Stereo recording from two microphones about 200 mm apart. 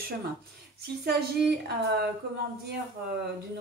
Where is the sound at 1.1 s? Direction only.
55° right (ahead or behind).